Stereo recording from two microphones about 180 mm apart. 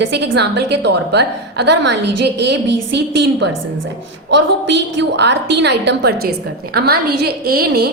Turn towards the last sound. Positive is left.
turn(degrees=-60)  # may be behind; listen again after turning